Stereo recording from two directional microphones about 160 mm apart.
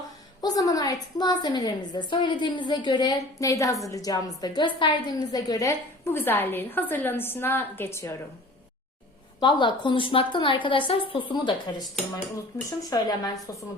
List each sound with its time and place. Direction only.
0.4 s a woman's voice: 25° left (ahead or behind)
9.4 s a woman's voice: 30° left (ahead or behind)
12.9 s a woman's voice: 25° left (ahead or behind)